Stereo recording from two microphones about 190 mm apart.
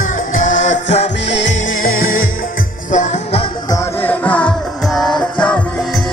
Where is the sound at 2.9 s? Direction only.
40° left (ahead or behind).